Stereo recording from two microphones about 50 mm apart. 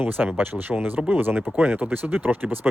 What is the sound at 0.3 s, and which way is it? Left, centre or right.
Speech, right.